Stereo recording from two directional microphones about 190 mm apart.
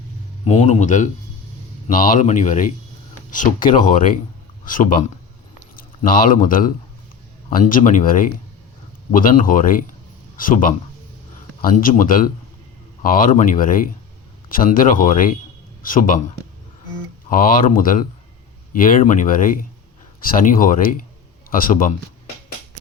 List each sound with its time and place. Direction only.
0.4 s speech: 35° left (ahead or behind)